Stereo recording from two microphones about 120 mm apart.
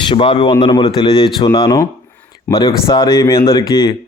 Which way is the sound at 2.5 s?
20° left (ahead or behind).